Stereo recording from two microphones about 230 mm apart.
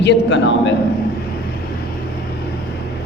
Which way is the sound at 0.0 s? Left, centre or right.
Left.